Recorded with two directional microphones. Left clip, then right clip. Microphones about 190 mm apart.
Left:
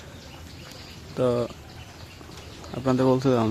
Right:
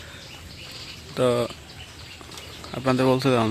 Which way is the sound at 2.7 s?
Centre (ahead or behind).